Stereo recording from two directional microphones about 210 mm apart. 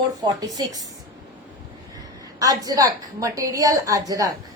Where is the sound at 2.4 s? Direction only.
15° right (ahead or behind).